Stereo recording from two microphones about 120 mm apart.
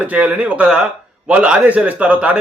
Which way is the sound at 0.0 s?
10° right (ahead or behind).